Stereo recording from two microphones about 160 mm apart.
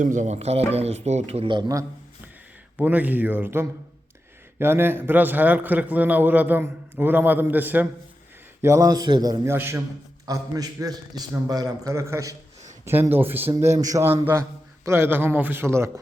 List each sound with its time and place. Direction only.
0.0 s speech: 50° right (ahead or behind); by 1.8 s 25° right (ahead or behind)
2.7 s a man's voice: 10° right (ahead or behind)